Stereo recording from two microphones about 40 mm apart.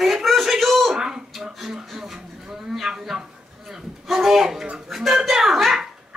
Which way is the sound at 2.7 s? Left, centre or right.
Centre.